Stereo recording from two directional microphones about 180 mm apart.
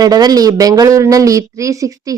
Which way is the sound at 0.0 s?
20° right (ahead or behind).